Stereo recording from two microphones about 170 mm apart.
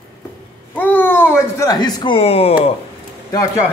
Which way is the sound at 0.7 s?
10° left (ahead or behind).